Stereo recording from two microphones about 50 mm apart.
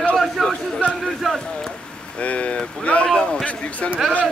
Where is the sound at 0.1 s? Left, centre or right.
Centre.